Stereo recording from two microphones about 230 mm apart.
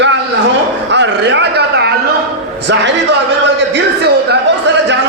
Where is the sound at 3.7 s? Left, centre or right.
Right.